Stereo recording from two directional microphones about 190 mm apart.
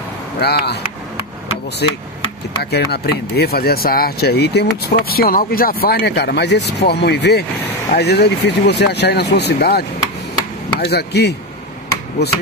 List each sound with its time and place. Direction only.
0.4 s speech: 60° left (ahead or behind)
2.6 s speech: 60° left (ahead or behind)